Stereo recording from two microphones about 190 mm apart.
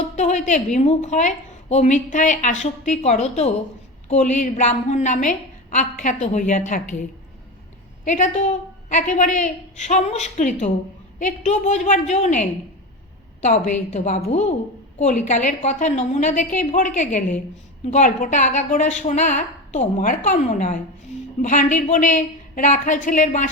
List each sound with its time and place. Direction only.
0.2 s a woman's voice: 40° left (ahead or behind)
8.0 s a woman's voice: 40° left (ahead or behind)